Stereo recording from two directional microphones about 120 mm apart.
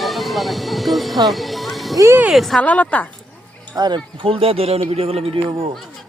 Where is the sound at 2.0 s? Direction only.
25° right (ahead or behind).